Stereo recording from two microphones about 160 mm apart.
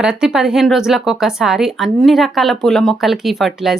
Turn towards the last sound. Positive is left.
turn(degrees=0)  # may be behind; listen again after turning